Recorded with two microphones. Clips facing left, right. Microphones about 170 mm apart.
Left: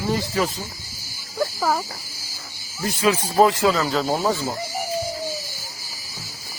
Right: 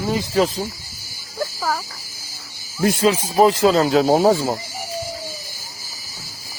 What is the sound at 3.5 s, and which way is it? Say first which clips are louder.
Cricket: right 4 dB; 30° right (ahead or behind).